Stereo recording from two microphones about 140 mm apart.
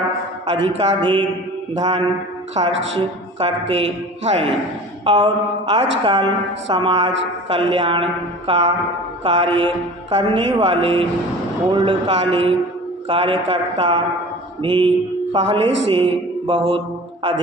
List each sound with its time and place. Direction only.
0.4 s a woman's voice: 35° right (ahead or behind)
3.4 s a man's voice: 45° right (ahead or behind)
5.0 s a woman's voice: 35° right (ahead or behind)